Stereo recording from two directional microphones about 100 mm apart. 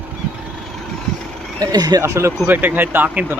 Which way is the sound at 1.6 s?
40° right (ahead or behind).